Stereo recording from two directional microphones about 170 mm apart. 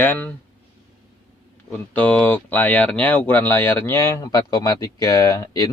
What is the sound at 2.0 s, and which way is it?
Speech, 10° left (ahead or behind).